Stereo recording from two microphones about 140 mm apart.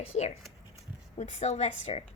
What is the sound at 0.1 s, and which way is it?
A woman's voice, 55° left (ahead or behind).